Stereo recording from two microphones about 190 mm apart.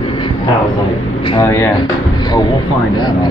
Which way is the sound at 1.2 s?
25° left (ahead or behind).